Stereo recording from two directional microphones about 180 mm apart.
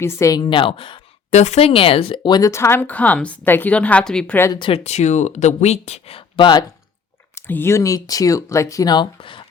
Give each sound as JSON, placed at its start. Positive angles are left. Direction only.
{"t": 0.0, "sound": "a woman's voice", "side_deg": 15}
{"t": 4.5, "sound": "speech", "side_deg": 30}
{"t": 7.3, "sound": "a woman's voice", "side_deg": 10}